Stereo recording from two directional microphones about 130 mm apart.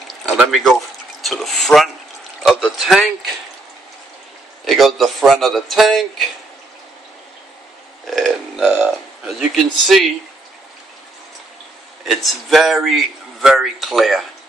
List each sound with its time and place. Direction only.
0.4 s a man's voice: centre (ahead or behind)
4.6 s a man's voice: centre (ahead or behind)
8.1 s burping: centre (ahead or behind)
8.6 s speech: 10° right (ahead or behind)
9.3 s a man's voice: centre (ahead or behind)
12.0 s a man's voice: centre (ahead or behind)